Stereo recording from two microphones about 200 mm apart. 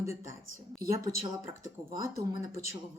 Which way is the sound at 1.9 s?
20° right (ahead or behind).